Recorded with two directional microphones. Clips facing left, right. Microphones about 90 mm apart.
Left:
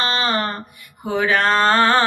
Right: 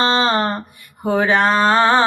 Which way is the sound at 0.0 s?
25° right (ahead or behind).